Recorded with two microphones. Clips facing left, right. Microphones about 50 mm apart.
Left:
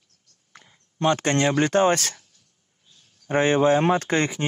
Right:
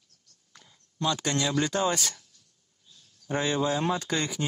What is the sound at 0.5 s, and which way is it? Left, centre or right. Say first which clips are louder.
Speech: left 3 dB; left.